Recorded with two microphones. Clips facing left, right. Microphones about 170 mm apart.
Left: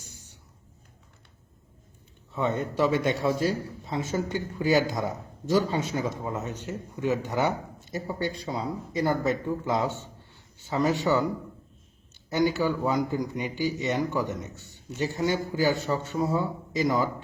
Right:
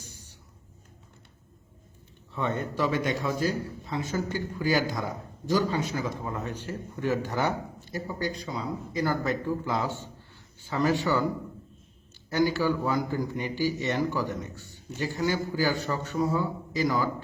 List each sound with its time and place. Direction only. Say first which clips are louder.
2.3 s speech: left 2 dB; 20° left (ahead or behind)
12.3 s speech: even; 20° left (ahead or behind)